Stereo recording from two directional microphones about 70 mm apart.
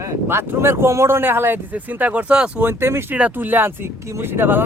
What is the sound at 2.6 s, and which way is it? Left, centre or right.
Speech, right.